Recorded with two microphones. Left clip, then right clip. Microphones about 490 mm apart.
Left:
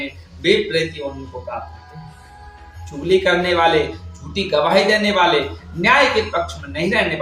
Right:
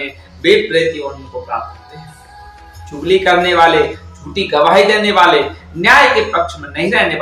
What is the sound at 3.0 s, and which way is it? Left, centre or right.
Speech, left.